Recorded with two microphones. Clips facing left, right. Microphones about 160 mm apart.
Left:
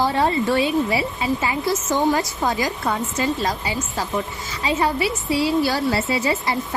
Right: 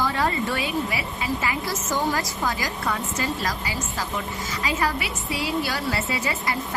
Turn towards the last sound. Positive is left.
turn(degrees=30)  # may be behind; listen again after turning